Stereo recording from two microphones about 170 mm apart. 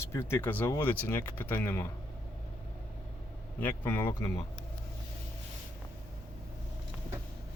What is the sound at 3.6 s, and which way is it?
Speech, 10° left (ahead or behind).